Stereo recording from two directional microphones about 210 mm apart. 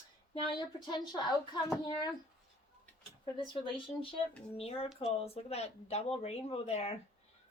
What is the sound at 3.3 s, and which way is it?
Speech, 25° left (ahead or behind).